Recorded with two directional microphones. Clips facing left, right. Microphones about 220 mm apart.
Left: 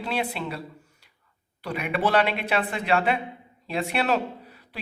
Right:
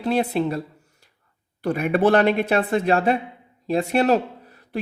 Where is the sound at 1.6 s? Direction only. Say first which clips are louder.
Right 7 dB; 45° right (ahead or behind).